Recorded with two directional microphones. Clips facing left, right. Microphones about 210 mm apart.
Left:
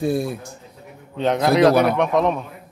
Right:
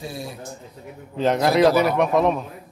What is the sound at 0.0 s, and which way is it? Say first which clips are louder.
Speech: left 11 dB; 55° left (ahead or behind).